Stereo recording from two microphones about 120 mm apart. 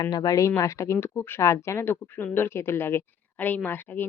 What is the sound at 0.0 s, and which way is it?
Speech, 35° left (ahead or behind).